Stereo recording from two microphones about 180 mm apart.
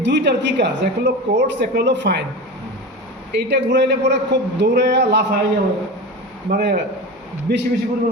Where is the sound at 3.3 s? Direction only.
75° right (ahead or behind).